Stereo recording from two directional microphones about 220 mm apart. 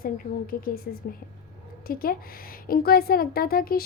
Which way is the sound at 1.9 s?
40° left (ahead or behind).